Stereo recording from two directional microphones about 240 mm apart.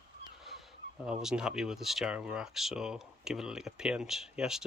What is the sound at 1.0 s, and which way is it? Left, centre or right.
Speech, centre.